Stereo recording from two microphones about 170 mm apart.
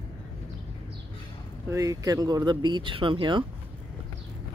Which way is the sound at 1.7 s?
20° right (ahead or behind).